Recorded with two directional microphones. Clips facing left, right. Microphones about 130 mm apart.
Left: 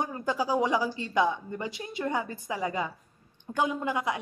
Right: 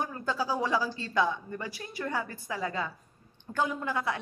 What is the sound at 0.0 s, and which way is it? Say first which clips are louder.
A man's voice: left 2 dB; 15° left (ahead or behind).